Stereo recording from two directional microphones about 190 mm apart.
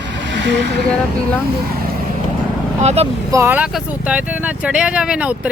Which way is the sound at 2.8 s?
35° right (ahead or behind).